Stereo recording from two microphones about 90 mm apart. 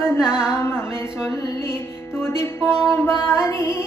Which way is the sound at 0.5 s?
30° left (ahead or behind).